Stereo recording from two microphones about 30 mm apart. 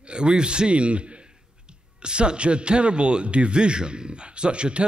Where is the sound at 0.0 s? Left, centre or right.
Right.